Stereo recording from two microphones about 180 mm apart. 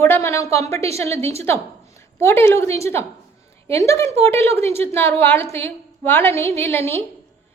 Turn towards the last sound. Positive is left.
turn(degrees=15)  # may be behind; listen again after turning